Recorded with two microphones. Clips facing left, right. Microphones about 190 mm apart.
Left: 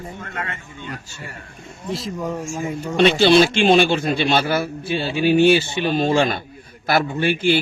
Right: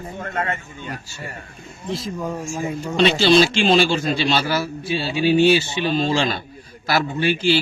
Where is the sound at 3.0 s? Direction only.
55° left (ahead or behind).